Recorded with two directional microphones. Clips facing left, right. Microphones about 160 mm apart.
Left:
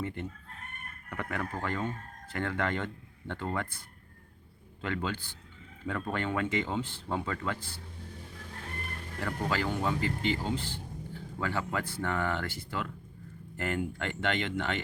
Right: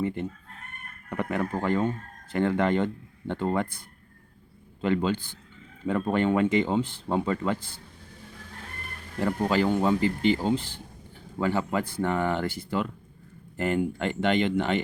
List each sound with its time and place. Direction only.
0.0 s chicken: 15° right (ahead or behind)
1.1 s speech: 20° right (ahead or behind)
4.8 s speech: 20° right (ahead or behind)
9.2 s speech: 20° right (ahead or behind)